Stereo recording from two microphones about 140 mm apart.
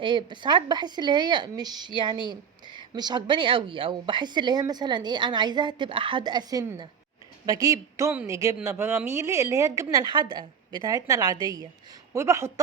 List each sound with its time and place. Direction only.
0.0 s a woman's voice: 35° right (ahead or behind)